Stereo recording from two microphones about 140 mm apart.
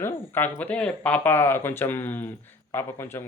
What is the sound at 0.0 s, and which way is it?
A man's voice, 15° left (ahead or behind).